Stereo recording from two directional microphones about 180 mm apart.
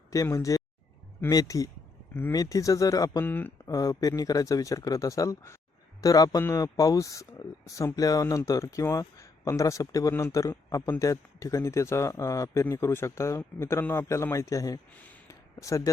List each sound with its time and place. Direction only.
0.1 s speech: 20° left (ahead or behind)